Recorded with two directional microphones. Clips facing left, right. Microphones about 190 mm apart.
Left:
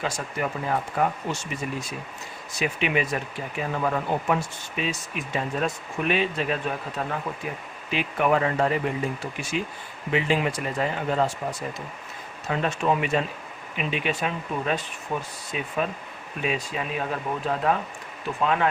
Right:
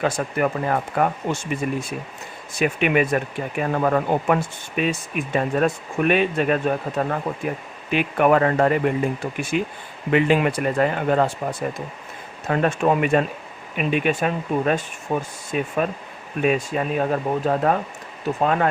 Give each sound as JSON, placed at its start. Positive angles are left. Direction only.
{"t": 0.0, "sound": "speech", "side_deg": -55}
{"t": 12.5, "sound": "speech", "side_deg": -50}